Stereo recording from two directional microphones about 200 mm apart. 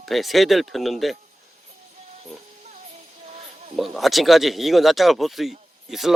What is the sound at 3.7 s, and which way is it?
Speech, centre (ahead or behind).